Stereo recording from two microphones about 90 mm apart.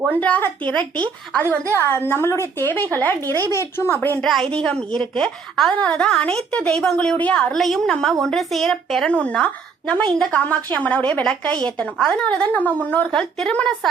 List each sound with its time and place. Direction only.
0.2 s a woman's voice: 15° left (ahead or behind)
2.9 s speech: 20° left (ahead or behind)
4.2 s a woman's voice: 5° left (ahead or behind)
7.5 s a woman's voice: 5° left (ahead or behind)